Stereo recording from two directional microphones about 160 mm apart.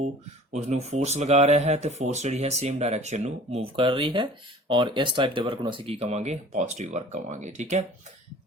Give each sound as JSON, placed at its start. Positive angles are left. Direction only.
{"t": 0.5, "sound": "speech", "side_deg": -45}